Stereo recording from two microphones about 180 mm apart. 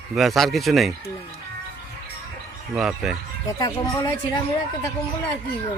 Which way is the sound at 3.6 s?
20° left (ahead or behind).